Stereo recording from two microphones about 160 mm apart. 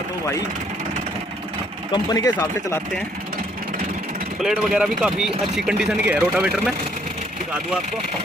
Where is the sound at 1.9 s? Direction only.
20° left (ahead or behind).